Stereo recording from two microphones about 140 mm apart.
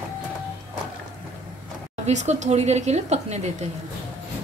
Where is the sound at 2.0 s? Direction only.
55° right (ahead or behind).